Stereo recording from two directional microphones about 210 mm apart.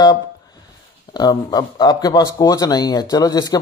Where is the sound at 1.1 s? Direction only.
20° left (ahead or behind).